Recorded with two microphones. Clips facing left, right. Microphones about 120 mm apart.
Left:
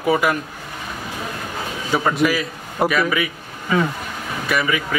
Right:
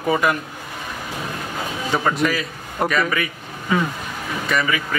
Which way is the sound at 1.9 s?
5° left (ahead or behind).